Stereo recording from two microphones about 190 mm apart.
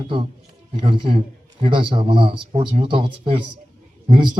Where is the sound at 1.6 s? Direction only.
25° right (ahead or behind).